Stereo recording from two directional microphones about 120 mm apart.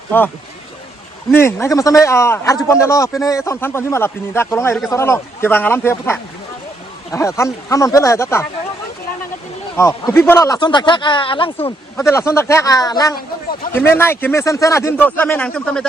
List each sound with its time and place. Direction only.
1.3 s speech: 20° left (ahead or behind)
9.8 s speech: 25° left (ahead or behind)
10.6 s speech: 40° left (ahead or behind)
12.0 s speech: 20° left (ahead or behind)
13.7 s speech: 20° left (ahead or behind)